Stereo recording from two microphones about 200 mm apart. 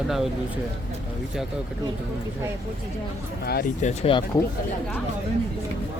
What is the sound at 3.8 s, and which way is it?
Speech, 25° left (ahead or behind).